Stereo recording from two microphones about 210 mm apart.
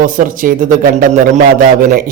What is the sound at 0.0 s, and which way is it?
A man's voice, 40° right (ahead or behind).